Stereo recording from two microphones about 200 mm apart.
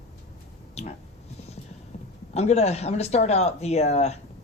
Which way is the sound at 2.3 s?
30° left (ahead or behind).